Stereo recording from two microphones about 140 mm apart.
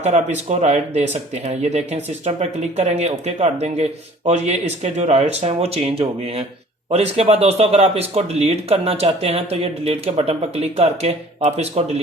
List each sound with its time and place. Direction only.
0.0 s speech: 55° right (ahead or behind)